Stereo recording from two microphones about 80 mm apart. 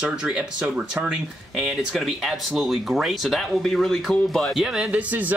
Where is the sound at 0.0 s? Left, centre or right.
Centre.